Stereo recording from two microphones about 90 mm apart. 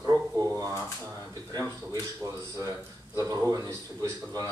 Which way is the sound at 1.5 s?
45° right (ahead or behind).